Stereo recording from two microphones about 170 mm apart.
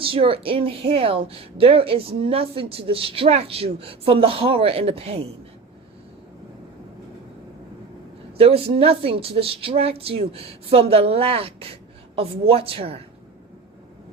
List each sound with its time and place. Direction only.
0.0 s a woman's voice: 30° right (ahead or behind)
8.4 s a woman's voice: 35° right (ahead or behind)